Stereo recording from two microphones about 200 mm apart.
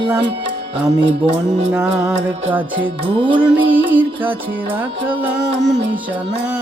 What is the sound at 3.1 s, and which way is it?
Music, 25° right (ahead or behind).